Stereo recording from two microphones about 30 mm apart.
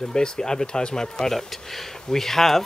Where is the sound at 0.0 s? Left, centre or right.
Left.